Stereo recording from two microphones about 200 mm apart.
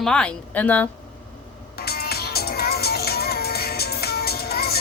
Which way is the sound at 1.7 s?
50° left (ahead or behind).